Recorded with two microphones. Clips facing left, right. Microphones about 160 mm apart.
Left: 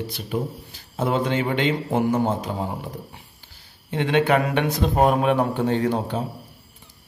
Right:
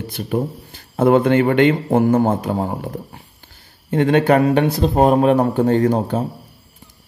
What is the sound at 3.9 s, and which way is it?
Speech, 45° right (ahead or behind).